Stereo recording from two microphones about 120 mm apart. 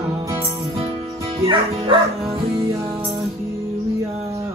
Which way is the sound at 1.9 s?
45° right (ahead or behind).